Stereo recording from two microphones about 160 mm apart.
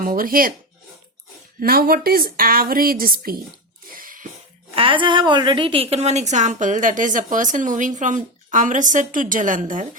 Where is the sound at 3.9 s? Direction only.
60° right (ahead or behind).